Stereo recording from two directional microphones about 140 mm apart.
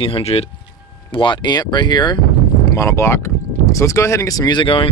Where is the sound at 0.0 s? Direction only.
45° left (ahead or behind).